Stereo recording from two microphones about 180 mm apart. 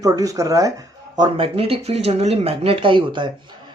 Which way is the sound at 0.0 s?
20° right (ahead or behind).